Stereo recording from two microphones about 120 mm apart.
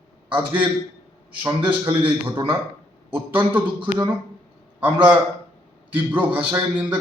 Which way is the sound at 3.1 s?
15° right (ahead or behind).